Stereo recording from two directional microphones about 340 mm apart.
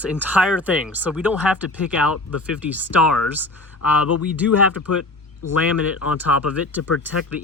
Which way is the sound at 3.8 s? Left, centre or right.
Left.